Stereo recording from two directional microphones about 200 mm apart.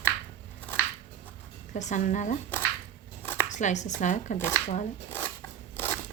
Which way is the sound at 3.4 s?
35° left (ahead or behind).